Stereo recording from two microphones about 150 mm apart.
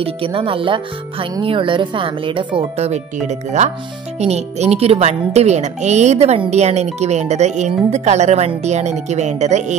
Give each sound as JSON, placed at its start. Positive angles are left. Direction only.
{"t": 0.0, "sound": "speech", "side_deg": -35}